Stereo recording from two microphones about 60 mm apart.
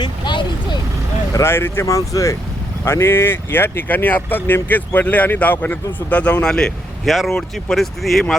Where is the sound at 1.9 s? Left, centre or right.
Left.